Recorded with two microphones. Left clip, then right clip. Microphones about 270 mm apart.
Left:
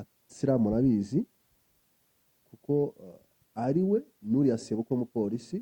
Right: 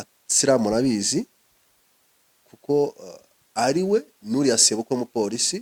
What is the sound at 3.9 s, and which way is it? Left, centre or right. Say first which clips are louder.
Speech: right 6 dB; centre.